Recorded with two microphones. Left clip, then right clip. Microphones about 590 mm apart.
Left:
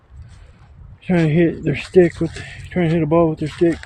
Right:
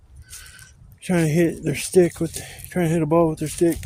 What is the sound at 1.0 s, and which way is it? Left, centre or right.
Speech, right.